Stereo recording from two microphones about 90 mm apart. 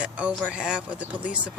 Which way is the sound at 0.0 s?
15° right (ahead or behind).